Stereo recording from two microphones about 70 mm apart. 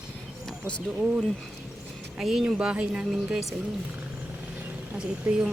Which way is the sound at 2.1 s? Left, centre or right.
Centre.